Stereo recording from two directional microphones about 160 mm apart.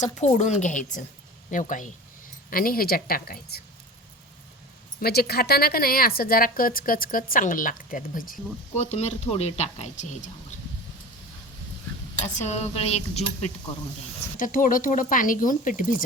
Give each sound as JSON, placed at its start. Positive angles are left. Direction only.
{"t": 0.3, "sound": "speech", "side_deg": 45}
{"t": 2.5, "sound": "speech", "side_deg": 65}
{"t": 4.9, "sound": "speech", "side_deg": 75}
{"t": 8.7, "sound": "speech", "side_deg": 40}
{"t": 12.2, "sound": "speech", "side_deg": 45}
{"t": 14.3, "sound": "speech", "side_deg": 55}